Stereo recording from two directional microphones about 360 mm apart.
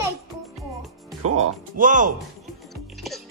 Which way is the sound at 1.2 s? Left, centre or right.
Centre.